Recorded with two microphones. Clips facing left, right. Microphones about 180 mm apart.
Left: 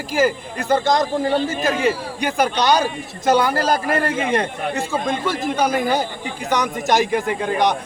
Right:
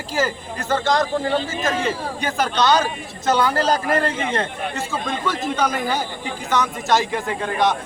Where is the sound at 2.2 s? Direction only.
10° left (ahead or behind).